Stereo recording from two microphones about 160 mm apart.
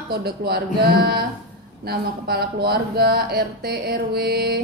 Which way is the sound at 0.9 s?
90° right.